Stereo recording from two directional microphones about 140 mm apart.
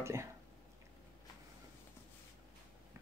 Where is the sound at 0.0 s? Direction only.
20° right (ahead or behind).